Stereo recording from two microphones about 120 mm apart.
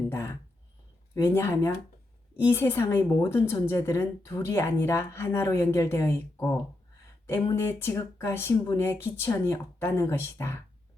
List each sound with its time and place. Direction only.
0.1 s a woman's voice: 20° left (ahead or behind)